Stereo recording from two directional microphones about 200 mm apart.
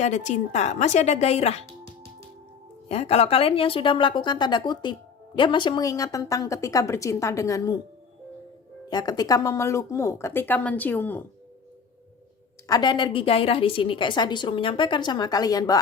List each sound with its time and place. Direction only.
0.0 s a woman's voice: 35° left (ahead or behind)
2.9 s a woman's voice: 30° left (ahead or behind)
8.9 s speech: 20° left (ahead or behind)
12.6 s a woman's voice: 20° left (ahead or behind)